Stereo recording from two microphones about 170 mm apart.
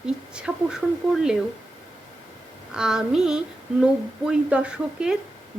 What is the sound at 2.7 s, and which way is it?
Speech, 5° right (ahead or behind).